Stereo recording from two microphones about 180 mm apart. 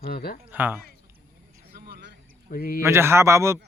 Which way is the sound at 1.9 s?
60° right (ahead or behind).